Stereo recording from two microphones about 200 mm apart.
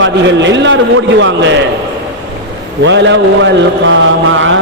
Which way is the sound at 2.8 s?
65° right (ahead or behind).